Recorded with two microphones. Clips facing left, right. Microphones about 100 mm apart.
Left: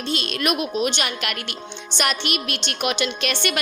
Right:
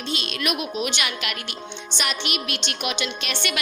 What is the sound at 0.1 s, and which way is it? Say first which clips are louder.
A woman's voice: left 4 dB; 45° left (ahead or behind).